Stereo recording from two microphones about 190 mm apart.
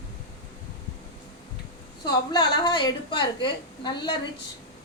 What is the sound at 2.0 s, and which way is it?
A woman's voice, 20° left (ahead or behind).